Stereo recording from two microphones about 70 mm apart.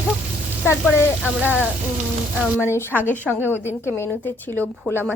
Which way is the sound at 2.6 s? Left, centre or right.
Left.